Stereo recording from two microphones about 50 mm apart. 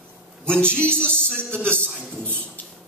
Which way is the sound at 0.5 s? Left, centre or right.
Left.